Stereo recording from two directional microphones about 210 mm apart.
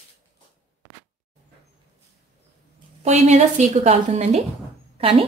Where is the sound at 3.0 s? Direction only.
30° right (ahead or behind).